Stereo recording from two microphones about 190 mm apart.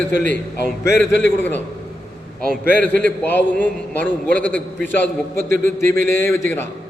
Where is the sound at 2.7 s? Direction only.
10° left (ahead or behind).